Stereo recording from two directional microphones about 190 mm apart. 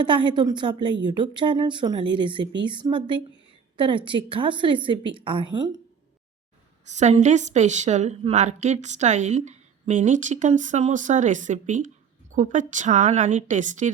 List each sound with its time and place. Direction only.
0.0 s a woman's voice: 25° right (ahead or behind)
6.8 s a woman's voice: 35° right (ahead or behind)